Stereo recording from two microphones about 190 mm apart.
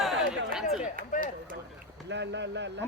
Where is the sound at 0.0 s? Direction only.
Centre (ahead or behind).